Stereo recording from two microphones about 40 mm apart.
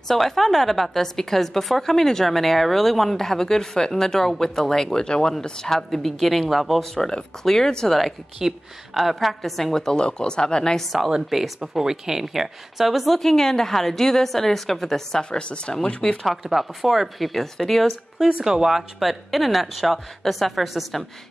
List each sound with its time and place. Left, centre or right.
0.1 s a woman's voice: centre
5.0 s speech: left; by 6.8 s centre
6.8 s a woman's voice: centre
8.4 s speech: centre
9.9 s speech: left
11.1 s a woman's voice: centre
15.2 s speech: left
16.2 s speech: centre
18.4 s speech: centre